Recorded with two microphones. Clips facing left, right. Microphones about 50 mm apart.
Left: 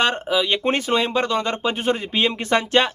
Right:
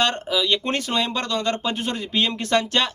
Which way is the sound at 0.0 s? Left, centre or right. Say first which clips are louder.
Left 2 dB; left.